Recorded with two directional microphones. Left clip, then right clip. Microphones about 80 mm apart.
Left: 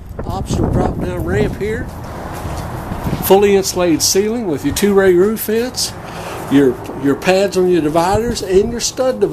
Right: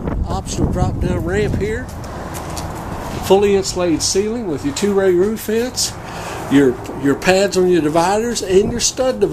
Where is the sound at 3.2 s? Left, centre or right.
Left.